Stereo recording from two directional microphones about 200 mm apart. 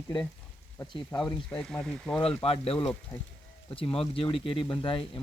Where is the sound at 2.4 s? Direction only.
30° left (ahead or behind).